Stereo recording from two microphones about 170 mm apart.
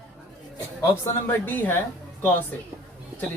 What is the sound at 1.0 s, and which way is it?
Speech, 10° left (ahead or behind).